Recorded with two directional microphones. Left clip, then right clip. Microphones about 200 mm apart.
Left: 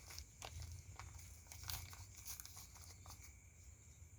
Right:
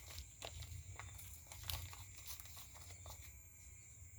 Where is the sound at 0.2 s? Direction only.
5° left (ahead or behind).